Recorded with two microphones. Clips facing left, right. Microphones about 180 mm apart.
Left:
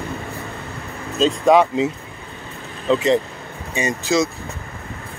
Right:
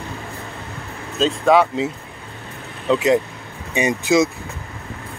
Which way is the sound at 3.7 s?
15° right (ahead or behind).